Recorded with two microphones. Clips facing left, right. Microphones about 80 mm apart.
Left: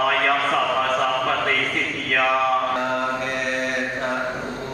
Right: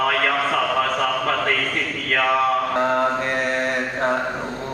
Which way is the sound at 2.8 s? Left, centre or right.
Right.